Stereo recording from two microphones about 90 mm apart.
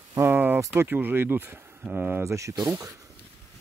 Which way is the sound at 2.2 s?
35° right (ahead or behind).